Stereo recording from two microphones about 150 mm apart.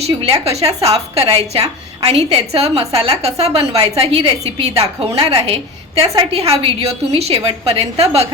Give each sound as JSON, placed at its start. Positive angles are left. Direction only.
{"t": 0.0, "sound": "a woman's voice", "side_deg": -45}